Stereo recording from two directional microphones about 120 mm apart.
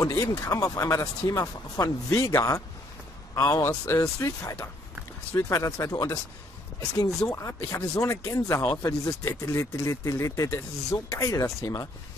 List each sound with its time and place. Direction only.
0.0 s speech: 25° left (ahead or behind)
3.6 s speech: 20° left (ahead or behind)
7.2 s speech: 25° left (ahead or behind)